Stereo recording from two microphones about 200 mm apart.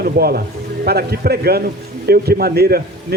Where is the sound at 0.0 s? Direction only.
50° right (ahead or behind).